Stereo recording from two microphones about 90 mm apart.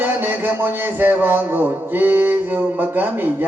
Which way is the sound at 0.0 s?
20° right (ahead or behind).